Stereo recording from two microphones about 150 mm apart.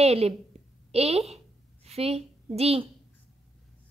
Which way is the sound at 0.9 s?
45° right (ahead or behind).